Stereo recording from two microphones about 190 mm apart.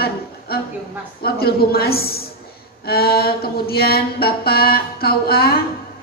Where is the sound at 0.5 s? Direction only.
55° left (ahead or behind).